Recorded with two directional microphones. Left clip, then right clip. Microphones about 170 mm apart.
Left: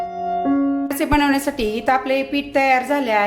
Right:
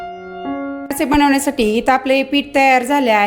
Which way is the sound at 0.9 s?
30° right (ahead or behind).